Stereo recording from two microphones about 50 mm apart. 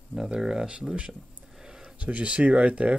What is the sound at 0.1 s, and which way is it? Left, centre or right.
Speech, centre.